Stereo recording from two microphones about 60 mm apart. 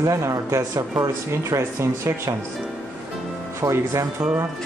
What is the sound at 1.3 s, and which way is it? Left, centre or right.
Speech, right.